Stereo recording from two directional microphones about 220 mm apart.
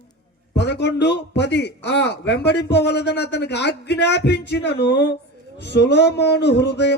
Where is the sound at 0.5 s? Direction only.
50° left (ahead or behind).